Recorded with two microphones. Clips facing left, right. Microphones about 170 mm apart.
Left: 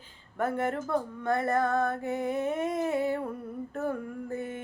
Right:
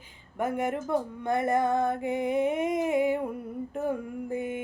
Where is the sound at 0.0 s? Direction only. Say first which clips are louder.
Even; 15° right (ahead or behind).